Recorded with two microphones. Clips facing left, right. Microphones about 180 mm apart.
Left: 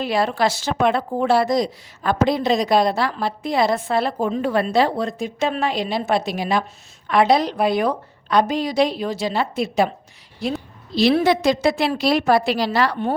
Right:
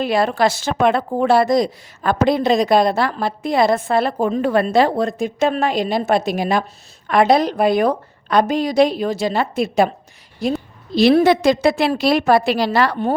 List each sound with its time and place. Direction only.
0.0 s a woman's voice: 50° right (ahead or behind)